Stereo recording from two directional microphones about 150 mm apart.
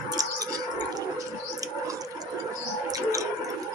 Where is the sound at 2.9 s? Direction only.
25° right (ahead or behind).